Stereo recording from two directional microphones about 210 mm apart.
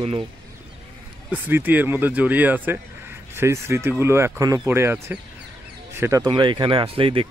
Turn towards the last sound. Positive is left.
turn(degrees=-25)  # may be behind; listen again after turning